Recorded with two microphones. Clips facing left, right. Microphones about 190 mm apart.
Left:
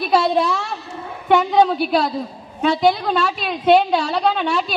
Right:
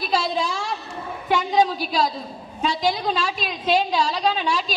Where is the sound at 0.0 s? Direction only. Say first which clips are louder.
Left 6 dB; 60° left (ahead or behind).